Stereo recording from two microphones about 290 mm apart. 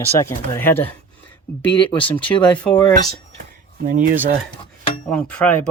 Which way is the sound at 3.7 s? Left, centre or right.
Right.